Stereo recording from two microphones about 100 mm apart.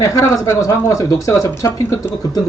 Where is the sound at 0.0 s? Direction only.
30° left (ahead or behind).